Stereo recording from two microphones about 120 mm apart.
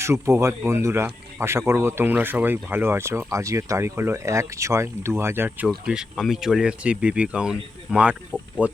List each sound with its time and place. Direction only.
0.0 s speech: 25° right (ahead or behind)
5.6 s speech: 5° right (ahead or behind)